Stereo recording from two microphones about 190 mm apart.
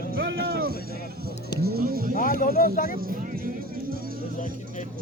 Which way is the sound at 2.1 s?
45° left (ahead or behind).